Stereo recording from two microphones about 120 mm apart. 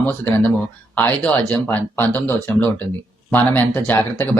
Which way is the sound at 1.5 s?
15° left (ahead or behind).